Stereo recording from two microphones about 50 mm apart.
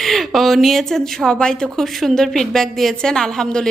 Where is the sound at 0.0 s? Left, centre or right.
Centre.